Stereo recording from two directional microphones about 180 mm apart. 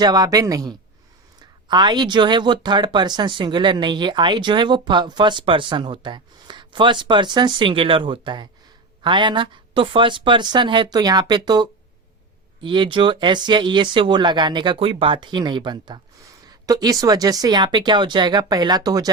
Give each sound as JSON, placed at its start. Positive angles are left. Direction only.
{"t": 0.0, "sound": "speech", "side_deg": -20}